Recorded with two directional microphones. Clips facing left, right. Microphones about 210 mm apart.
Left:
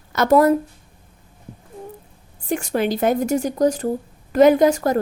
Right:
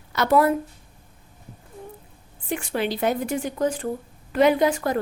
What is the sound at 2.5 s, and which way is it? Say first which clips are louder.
A woman's voice: left 5 dB; 45° left (ahead or behind).